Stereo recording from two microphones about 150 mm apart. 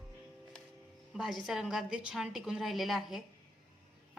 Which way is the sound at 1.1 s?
Centre (ahead or behind).